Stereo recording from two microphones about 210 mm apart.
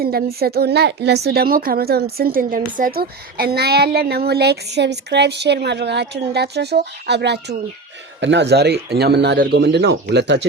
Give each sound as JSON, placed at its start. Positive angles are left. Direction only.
{"t": 0.0, "sound": "a woman's voice", "side_deg": -45}